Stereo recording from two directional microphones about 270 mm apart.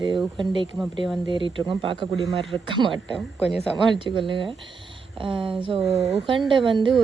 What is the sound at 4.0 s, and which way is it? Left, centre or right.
Speech, centre.